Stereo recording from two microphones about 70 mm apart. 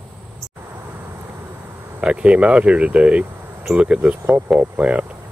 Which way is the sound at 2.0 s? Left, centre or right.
Centre.